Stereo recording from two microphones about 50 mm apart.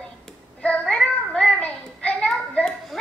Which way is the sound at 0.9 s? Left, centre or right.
Centre.